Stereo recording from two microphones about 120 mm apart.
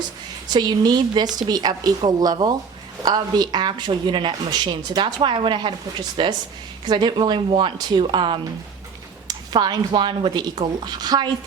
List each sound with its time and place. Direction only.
0.4 s speech: 35° right (ahead or behind)